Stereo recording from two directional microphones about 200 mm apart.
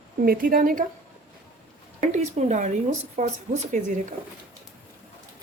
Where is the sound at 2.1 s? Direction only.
35° right (ahead or behind).